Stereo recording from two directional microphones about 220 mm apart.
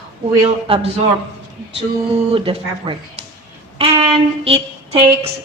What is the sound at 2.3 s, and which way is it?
A woman's voice, 25° right (ahead or behind).